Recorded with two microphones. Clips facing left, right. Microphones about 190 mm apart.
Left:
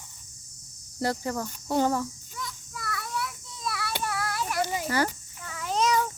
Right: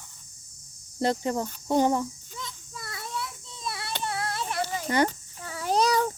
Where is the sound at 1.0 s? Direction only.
20° right (ahead or behind).